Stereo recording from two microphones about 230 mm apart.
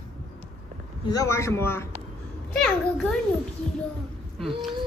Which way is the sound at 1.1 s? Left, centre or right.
Centre.